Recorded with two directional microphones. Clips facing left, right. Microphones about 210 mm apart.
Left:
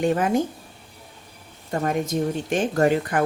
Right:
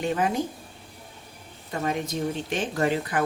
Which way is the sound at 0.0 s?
50° left (ahead or behind).